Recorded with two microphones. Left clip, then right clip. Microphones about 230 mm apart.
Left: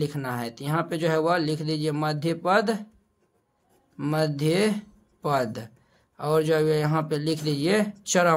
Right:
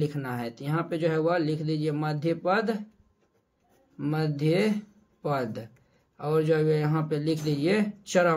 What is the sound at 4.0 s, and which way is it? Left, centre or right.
Speech, left.